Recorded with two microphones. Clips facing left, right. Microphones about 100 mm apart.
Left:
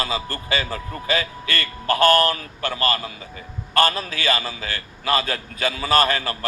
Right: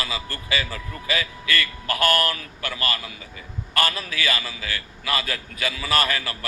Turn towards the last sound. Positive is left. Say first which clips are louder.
# left 5 dB
turn(degrees=35)  # may be behind; listen again after turning